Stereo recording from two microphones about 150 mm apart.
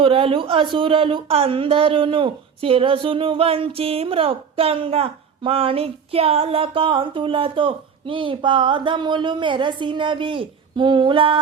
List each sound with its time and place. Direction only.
0.0 s speech: 40° right (ahead or behind)